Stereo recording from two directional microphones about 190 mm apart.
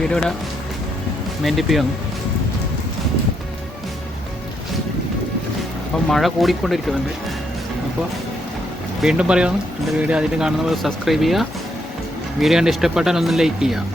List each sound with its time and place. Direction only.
0.0 s speech: 5° left (ahead or behind)
1.5 s speech: centre (ahead or behind)
6.1 s speech: centre (ahead or behind)
9.0 s speech: 5° right (ahead or behind)